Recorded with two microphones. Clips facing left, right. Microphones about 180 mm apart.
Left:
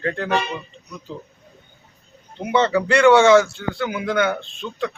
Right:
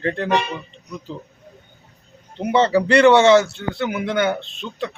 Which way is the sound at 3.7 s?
25° right (ahead or behind).